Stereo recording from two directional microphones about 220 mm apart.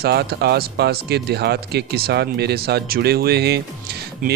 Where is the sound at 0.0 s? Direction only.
45° right (ahead or behind).